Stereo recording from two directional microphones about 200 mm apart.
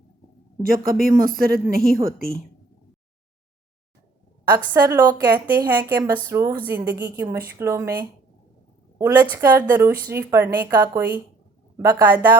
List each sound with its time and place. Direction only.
0.6 s a woman's voice: 45° right (ahead or behind)
4.4 s a woman's voice: 20° right (ahead or behind)
9.0 s a woman's voice: 15° right (ahead or behind)